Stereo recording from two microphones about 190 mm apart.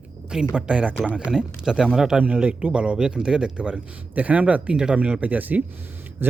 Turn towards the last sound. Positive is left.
turn(degrees=-10)  # may be behind; listen again after turning